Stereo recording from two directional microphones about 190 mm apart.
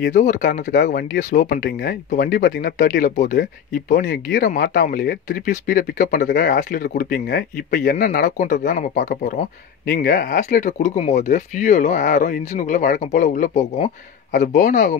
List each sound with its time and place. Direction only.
0.1 s speech: 40° left (ahead or behind)